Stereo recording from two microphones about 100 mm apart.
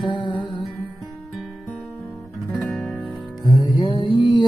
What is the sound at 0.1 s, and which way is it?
Music, 50° left (ahead or behind).